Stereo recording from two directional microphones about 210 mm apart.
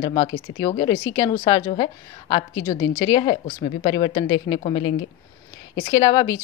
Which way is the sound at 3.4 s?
40° left (ahead or behind).